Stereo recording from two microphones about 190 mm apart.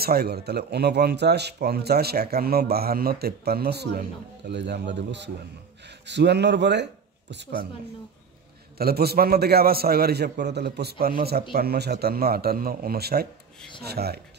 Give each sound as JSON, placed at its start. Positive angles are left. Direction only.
{"t": 0.0, "sound": "speech", "side_deg": -55}
{"t": 8.7, "sound": "speech", "side_deg": -55}